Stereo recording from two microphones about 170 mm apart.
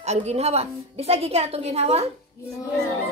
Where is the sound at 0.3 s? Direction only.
40° right (ahead or behind).